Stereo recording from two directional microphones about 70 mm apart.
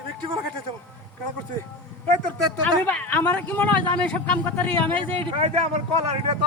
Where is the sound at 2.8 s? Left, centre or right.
Left.